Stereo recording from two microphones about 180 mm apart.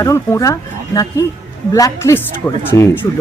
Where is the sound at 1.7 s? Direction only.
15° left (ahead or behind).